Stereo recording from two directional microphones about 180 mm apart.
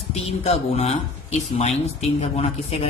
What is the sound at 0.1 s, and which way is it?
Speech, 35° left (ahead or behind).